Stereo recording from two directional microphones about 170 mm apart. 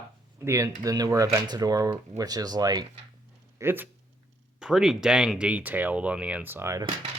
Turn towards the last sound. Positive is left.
turn(degrees=-15)  # may be behind; listen again after turning